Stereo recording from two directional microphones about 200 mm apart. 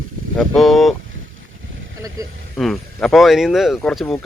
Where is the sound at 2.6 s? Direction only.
Centre (ahead or behind).